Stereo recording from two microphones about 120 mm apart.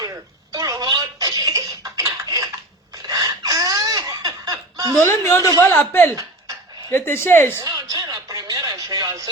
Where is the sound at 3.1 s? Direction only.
30° right (ahead or behind).